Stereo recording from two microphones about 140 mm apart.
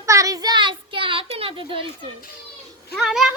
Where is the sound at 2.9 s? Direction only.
Centre (ahead or behind).